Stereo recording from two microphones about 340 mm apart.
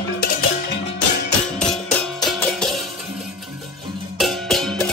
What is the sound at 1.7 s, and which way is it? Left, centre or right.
Music, centre.